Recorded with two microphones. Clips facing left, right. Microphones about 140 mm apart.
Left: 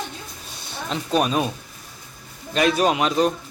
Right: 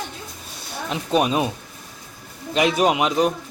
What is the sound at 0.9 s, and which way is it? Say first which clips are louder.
Speech: right 1 dB; 15° right (ahead or behind).